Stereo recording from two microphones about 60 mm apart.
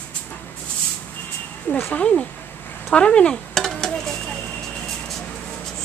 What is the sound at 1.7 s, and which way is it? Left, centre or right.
Speech, left.